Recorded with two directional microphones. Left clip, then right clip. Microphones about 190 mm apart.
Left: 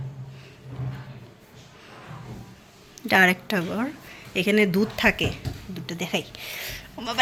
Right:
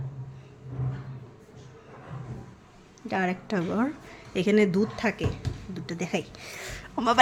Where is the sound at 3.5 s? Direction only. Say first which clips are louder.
Left 1 dB; 10° right (ahead or behind); by 5.4 s 5° left (ahead or behind).